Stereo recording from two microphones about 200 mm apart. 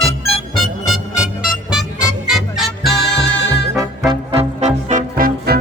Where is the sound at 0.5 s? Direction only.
Centre (ahead or behind).